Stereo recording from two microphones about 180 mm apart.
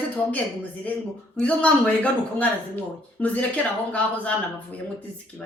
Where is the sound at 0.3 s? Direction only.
10° left (ahead or behind).